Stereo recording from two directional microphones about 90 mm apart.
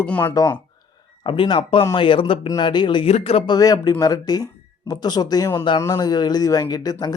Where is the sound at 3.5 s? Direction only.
45° left (ahead or behind).